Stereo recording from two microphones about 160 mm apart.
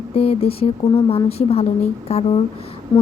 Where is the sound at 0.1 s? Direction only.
40° left (ahead or behind).